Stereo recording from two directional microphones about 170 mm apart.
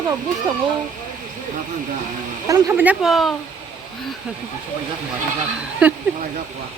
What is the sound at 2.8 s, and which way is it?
Speech, 5° right (ahead or behind).